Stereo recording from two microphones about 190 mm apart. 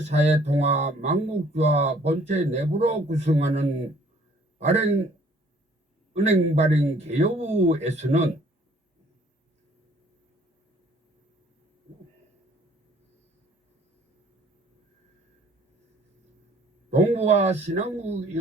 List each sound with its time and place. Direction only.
0.0 s a man's voice: 35° right (ahead or behind)
6.2 s speech: 35° right (ahead or behind)
17.1 s speech: 35° right (ahead or behind)